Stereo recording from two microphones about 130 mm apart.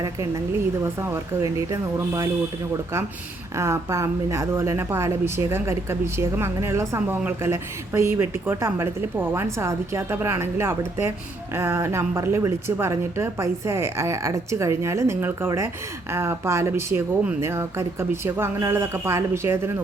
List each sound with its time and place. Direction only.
1.0 s speech: 20° right (ahead or behind)
3.6 s speech: 20° right (ahead or behind)